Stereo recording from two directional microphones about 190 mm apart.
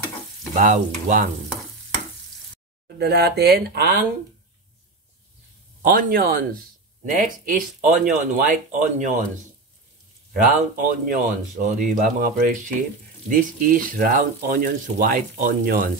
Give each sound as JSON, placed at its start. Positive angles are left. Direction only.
{"t": 0.6, "sound": "speech", "side_deg": -40}
{"t": 3.0, "sound": "speech", "side_deg": -55}
{"t": 5.8, "sound": "speech", "side_deg": -50}
{"t": 10.3, "sound": "speech", "side_deg": -45}